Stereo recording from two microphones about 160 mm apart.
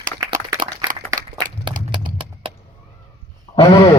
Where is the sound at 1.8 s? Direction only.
55° right (ahead or behind).